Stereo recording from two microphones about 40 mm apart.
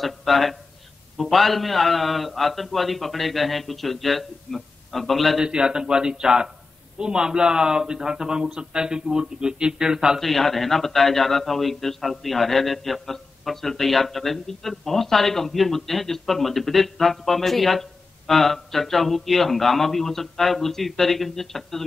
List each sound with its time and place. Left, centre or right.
0.0 s a man's voice: centre
5.4 s speech: centre
10.2 s a man's voice: centre